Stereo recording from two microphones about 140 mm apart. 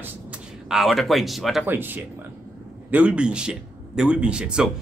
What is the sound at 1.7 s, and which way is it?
A man's voice, 15° right (ahead or behind).